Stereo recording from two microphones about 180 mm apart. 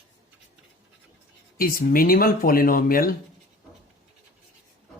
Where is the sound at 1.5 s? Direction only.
55° left (ahead or behind).